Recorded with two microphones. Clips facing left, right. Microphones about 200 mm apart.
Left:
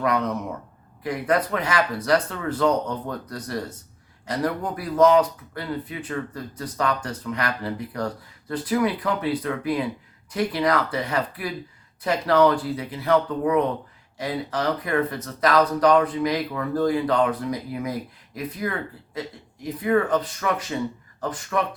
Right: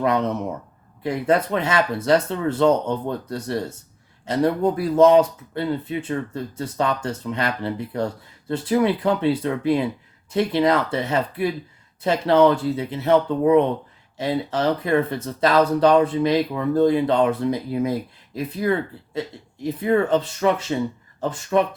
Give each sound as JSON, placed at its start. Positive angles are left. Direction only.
{"t": 0.0, "sound": "speech", "side_deg": -25}